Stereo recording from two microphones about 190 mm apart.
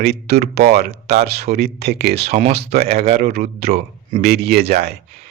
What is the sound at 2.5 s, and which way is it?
Speech, 55° right (ahead or behind).